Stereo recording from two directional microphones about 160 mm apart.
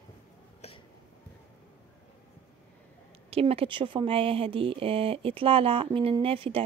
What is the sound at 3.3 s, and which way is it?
Speech, 35° right (ahead or behind).